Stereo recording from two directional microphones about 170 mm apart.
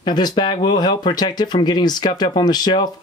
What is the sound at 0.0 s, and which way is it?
Speech, 25° left (ahead or behind).